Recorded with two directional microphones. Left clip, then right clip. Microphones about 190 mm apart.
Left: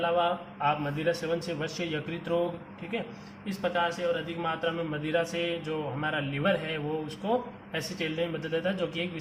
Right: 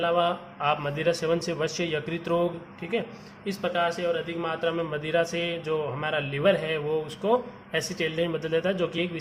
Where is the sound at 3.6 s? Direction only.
40° right (ahead or behind).